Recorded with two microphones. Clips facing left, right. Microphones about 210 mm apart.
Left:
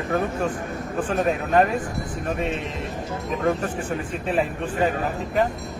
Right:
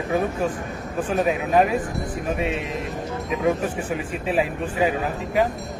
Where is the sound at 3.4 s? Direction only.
5° right (ahead or behind).